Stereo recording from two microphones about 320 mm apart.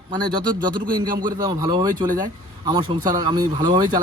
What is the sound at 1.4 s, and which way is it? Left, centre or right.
A man's voice, centre.